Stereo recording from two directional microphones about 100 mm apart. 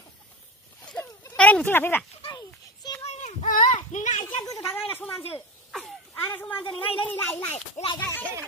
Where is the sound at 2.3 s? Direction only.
45° left (ahead or behind).